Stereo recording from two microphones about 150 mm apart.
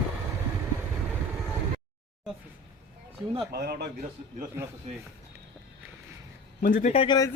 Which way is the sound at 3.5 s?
90° right.